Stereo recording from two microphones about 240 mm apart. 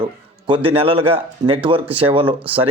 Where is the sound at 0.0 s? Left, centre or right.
Right.